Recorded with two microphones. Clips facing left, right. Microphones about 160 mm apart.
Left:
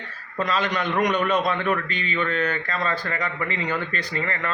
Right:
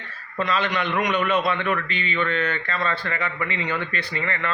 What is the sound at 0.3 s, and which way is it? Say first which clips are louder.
A man's voice: even; 40° left (ahead or behind).